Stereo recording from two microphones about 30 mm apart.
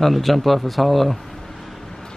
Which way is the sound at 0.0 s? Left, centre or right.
Centre.